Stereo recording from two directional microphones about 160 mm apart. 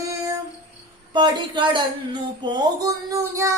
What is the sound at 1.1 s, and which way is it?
Female singing, 30° right (ahead or behind).